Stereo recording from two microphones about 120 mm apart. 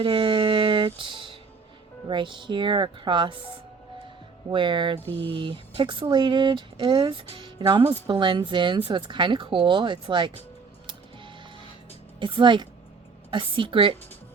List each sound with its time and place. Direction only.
0.0 s speech: 45° right (ahead or behind)
4.4 s speech: 40° right (ahead or behind)
12.2 s speech: 40° right (ahead or behind)